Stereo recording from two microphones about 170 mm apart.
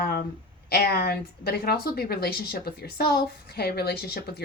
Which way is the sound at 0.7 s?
65° left (ahead or behind).